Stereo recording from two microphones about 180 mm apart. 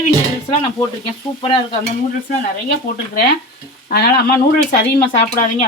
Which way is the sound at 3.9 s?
60° left (ahead or behind).